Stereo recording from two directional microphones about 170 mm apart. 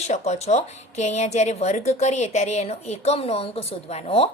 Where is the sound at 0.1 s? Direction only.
40° left (ahead or behind).